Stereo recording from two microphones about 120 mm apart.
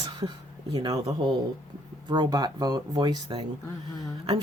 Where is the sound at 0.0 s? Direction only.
35° right (ahead or behind).